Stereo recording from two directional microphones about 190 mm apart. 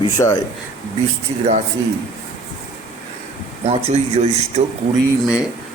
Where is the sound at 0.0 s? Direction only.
15° left (ahead or behind).